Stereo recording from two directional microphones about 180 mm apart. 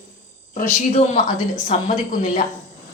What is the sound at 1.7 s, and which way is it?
Speech, 45° left (ahead or behind).